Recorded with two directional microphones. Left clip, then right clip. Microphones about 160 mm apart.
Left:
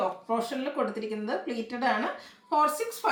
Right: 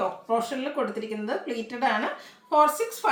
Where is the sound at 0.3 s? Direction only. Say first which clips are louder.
Right 3 dB; 15° right (ahead or behind).